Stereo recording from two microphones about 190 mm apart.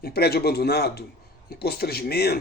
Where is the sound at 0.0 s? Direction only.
55° left (ahead or behind).